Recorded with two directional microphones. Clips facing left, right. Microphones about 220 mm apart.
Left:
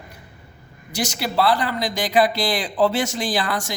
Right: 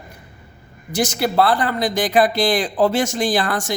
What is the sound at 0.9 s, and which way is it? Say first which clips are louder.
Speech: right 5 dB; 50° right (ahead or behind).